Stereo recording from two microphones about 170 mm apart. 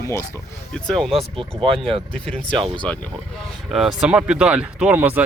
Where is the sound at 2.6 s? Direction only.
30° right (ahead or behind).